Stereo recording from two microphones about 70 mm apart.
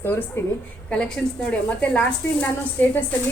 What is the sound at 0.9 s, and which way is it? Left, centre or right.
A woman's voice, centre.